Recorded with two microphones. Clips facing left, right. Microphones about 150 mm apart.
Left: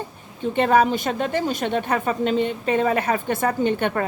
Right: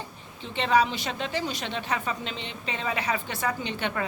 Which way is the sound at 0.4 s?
50° left (ahead or behind).